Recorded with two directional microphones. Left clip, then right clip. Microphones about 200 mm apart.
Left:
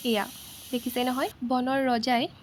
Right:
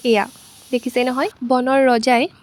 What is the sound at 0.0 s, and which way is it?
Speech, 35° right (ahead or behind).